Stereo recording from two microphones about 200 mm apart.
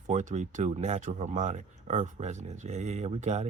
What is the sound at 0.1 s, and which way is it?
Speech, 35° right (ahead or behind).